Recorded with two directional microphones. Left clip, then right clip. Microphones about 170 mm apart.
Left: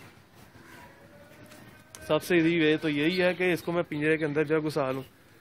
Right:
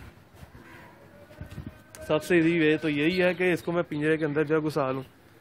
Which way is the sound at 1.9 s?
5° left (ahead or behind).